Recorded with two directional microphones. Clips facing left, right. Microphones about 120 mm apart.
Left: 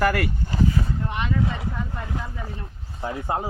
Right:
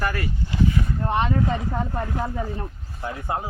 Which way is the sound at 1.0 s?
35° right (ahead or behind).